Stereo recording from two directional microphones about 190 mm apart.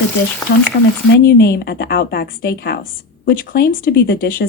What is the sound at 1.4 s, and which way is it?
Speech, 55° left (ahead or behind).